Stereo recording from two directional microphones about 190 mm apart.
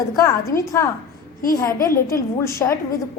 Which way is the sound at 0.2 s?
15° left (ahead or behind).